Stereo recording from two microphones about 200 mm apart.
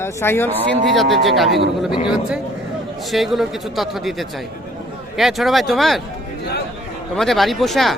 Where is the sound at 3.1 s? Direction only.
Centre (ahead or behind).